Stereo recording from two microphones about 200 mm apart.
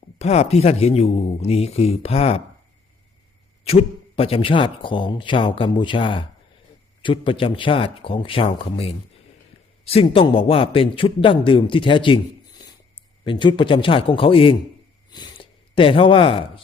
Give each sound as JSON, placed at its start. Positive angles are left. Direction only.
{"t": 0.2, "sound": "speech", "side_deg": 30}
{"t": 3.6, "sound": "a man's voice", "side_deg": 30}